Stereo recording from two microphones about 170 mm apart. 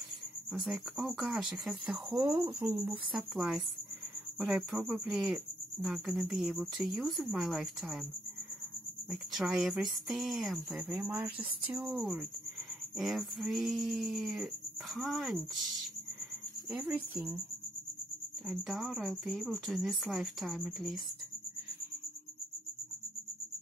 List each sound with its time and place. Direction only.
0.5 s a woman's voice: 5° right (ahead or behind)
9.1 s a woman's voice: centre (ahead or behind)
18.5 s a woman's voice: centre (ahead or behind)